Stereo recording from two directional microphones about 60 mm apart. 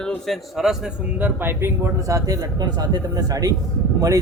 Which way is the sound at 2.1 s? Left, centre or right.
Right.